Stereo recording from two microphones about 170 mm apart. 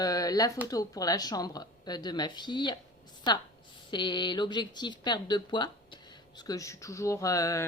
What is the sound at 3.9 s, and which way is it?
Speech, 25° left (ahead or behind).